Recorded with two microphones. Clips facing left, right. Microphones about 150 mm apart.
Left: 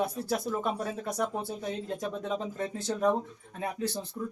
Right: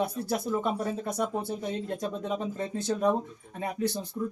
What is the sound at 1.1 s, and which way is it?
Speech, 20° right (ahead or behind).